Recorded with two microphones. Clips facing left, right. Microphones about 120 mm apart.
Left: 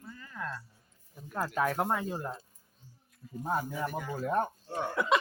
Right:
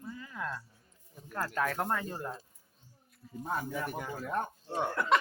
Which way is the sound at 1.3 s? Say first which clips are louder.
Left 2 dB; 10° left (ahead or behind).